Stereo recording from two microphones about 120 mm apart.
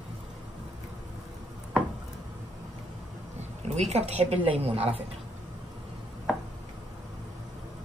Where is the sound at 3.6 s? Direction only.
65° right (ahead or behind).